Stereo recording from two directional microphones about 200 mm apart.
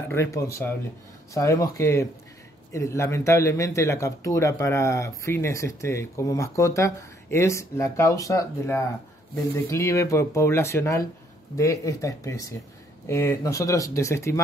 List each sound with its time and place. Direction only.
0.1 s a man's voice: 15° left (ahead or behind)